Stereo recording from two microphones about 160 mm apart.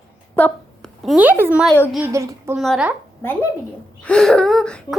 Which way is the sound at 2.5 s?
Centre (ahead or behind).